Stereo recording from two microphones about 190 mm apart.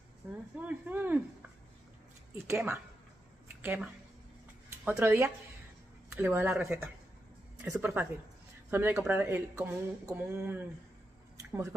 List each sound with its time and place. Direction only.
0.6 s speech: 10° right (ahead or behind)
2.3 s speech: 15° right (ahead or behind)
11.3 s a sound: 15° right (ahead or behind)